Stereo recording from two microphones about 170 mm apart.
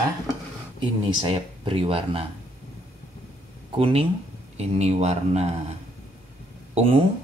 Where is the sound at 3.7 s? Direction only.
35° right (ahead or behind).